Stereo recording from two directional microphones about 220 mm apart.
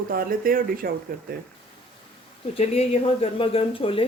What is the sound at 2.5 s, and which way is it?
Speech, 25° left (ahead or behind).